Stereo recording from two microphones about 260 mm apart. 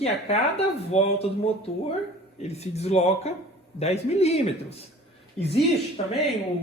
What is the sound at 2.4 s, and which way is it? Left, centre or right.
Speech, left.